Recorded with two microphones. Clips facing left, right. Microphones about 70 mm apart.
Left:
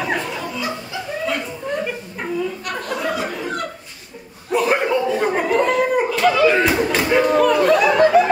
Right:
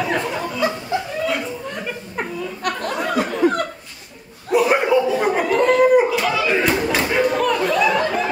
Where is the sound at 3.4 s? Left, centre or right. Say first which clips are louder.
Right 9 dB; right.